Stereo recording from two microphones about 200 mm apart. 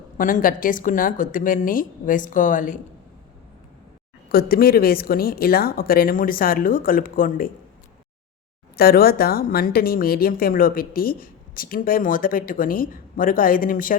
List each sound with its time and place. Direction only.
0.2 s a woman's voice: 40° left (ahead or behind)
4.3 s a woman's voice: 50° left (ahead or behind)
8.7 s a woman's voice: 50° left (ahead or behind)